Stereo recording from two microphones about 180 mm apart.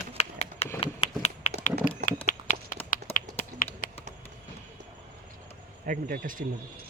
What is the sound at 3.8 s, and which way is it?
Typing, 50° left (ahead or behind).